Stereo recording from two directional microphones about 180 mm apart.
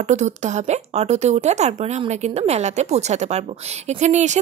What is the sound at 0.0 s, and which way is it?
A woman's voice, 40° right (ahead or behind).